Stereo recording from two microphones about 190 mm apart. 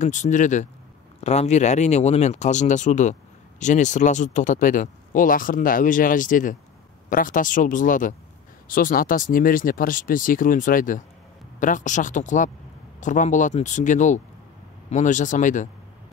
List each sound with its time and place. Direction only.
0.0 s speech: 40° left (ahead or behind)